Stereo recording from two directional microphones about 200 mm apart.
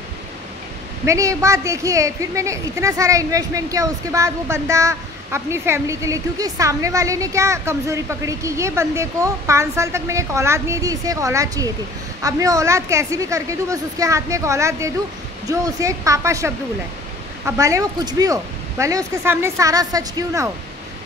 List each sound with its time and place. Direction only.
1.0 s a woman's voice: 15° right (ahead or behind)